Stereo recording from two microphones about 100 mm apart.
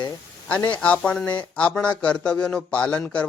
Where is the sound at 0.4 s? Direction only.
15° left (ahead or behind).